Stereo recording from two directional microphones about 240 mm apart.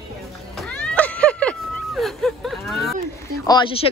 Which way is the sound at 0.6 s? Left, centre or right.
Centre.